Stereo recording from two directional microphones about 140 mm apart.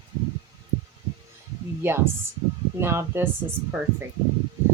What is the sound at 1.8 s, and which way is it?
Speech, 15° right (ahead or behind).